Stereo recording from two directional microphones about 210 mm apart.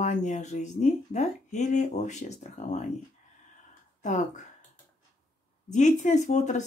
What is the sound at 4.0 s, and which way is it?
Speech, 35° left (ahead or behind).